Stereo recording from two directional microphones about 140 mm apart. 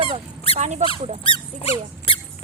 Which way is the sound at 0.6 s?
55° right (ahead or behind).